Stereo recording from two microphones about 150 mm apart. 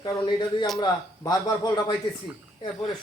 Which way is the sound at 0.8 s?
25° left (ahead or behind).